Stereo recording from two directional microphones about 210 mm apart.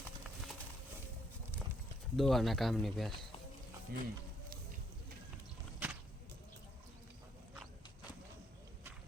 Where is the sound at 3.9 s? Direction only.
45° right (ahead or behind).